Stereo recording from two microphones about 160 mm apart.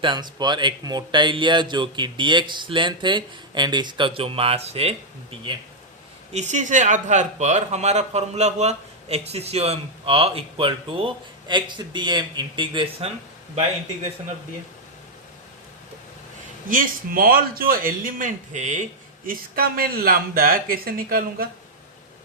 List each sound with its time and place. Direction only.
0.0 s speech: 30° right (ahead or behind)
6.3 s a man's voice: 45° right (ahead or behind); by 13.1 s 30° right (ahead or behind)
16.6 s a man's voice: 60° right (ahead or behind)
19.2 s speech: 65° right (ahead or behind)